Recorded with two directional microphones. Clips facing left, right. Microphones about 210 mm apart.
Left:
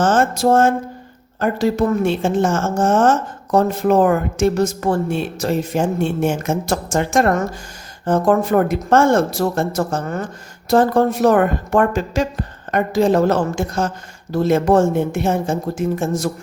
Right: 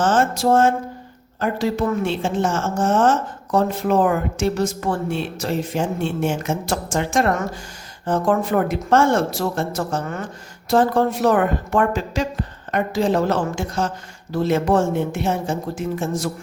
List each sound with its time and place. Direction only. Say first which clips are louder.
0.0 s a woman's voice: left 3 dB; 45° left (ahead or behind)